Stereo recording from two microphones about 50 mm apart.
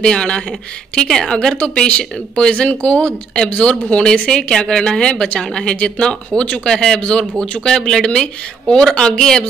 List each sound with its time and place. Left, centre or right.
0.0 s a man's voice: centre